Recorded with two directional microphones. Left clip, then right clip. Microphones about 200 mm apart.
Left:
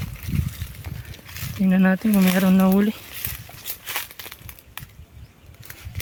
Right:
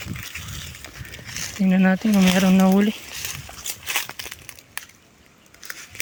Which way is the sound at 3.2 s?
40° right (ahead or behind).